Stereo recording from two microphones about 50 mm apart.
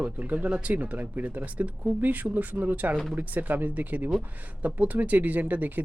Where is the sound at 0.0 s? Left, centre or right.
Right.